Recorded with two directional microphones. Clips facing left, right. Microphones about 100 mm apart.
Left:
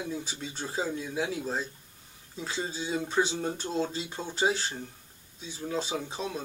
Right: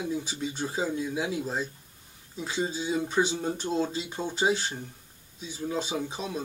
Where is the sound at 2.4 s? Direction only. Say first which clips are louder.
Right 4 dB; 15° right (ahead or behind).